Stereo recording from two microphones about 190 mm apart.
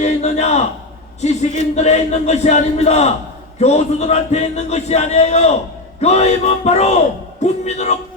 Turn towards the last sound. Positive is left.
turn(degrees=35)  # may be behind; listen again after turning